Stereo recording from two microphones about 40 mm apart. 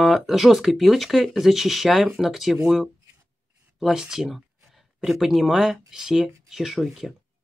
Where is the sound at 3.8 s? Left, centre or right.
Centre.